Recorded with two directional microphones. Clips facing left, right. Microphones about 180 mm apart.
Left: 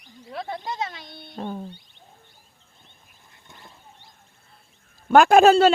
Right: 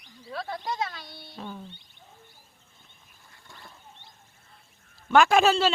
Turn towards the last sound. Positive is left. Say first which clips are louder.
# left 6 dB
turn(degrees=50)  # may be behind; listen again after turning